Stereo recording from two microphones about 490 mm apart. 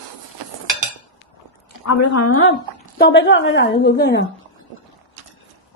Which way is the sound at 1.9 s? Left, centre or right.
Left.